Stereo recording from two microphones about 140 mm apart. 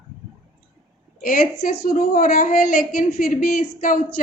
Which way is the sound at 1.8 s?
65° left (ahead or behind).